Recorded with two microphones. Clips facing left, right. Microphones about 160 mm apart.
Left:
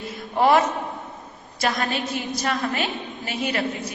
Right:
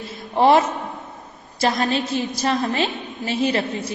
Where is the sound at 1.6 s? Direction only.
30° right (ahead or behind).